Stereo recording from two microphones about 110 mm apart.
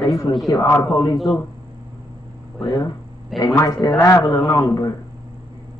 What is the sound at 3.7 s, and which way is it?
Speech, 35° left (ahead or behind).